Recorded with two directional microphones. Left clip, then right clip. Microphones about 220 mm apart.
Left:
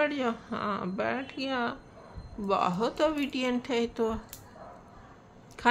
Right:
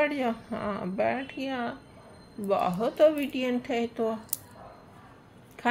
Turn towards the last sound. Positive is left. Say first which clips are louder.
# even
turn(degrees=5)  # may be behind; listen again after turning